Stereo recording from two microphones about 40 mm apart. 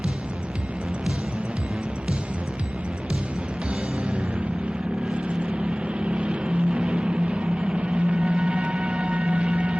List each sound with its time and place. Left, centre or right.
5.1 s vehicle: right
6.0 s music: right